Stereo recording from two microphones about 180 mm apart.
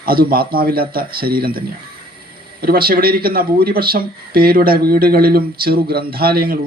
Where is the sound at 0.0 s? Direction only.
55° right (ahead or behind).